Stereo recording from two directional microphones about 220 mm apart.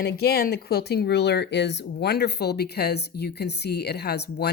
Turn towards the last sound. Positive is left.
turn(degrees=45)  # may be behind; listen again after turning